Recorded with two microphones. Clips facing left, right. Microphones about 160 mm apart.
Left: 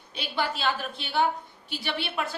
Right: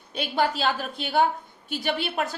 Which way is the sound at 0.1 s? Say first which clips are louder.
Right 5 dB; 50° right (ahead or behind).